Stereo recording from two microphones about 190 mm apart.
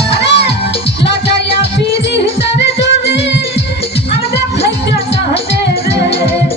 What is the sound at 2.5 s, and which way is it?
Music, 65° left (ahead or behind).